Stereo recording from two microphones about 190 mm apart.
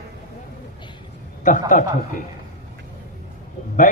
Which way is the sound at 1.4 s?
40° left (ahead or behind).